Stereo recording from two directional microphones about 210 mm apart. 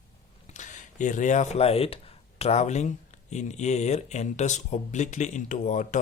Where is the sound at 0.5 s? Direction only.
35° left (ahead or behind).